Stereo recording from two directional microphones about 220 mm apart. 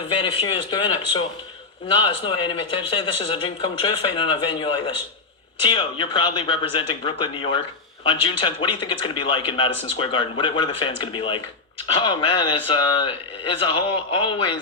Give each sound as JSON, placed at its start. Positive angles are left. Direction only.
{"t": 0.1, "sound": "a man's voice", "side_deg": 25}